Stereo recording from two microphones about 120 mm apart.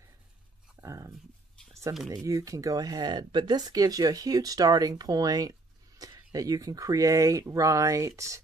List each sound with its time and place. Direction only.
0.7 s speech: 25° right (ahead or behind)